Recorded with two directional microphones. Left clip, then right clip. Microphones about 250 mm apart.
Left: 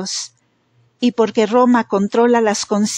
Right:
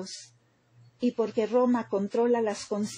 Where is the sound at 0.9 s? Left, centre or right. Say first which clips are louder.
Left 12 dB; left.